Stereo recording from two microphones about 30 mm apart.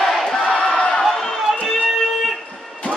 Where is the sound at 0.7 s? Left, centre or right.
Left.